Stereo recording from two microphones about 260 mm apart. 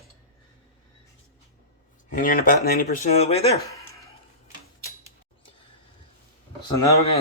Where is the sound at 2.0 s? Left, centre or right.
Left.